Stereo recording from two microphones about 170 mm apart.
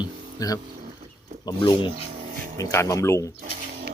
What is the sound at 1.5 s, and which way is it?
Speech, 25° left (ahead or behind).